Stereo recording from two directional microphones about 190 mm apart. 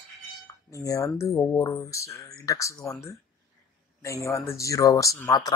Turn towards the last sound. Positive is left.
turn(degrees=20)  # may be behind; listen again after turning